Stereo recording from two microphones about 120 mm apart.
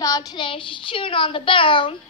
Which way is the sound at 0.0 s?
30° left (ahead or behind).